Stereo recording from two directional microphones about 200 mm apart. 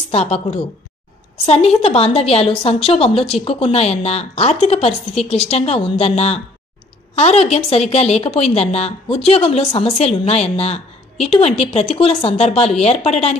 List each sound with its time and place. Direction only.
0.1 s a woman's voice: 30° left (ahead or behind)